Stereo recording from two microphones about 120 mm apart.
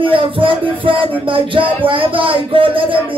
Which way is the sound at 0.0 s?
45° right (ahead or behind).